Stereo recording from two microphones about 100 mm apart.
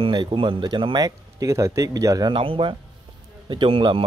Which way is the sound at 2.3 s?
60° right (ahead or behind).